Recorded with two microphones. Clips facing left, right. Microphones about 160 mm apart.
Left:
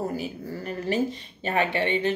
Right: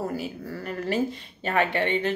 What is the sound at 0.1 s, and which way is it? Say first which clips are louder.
Speech: even; 15° left (ahead or behind).